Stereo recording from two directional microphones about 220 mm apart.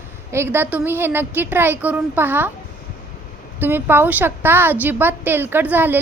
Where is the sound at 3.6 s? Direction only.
10° right (ahead or behind).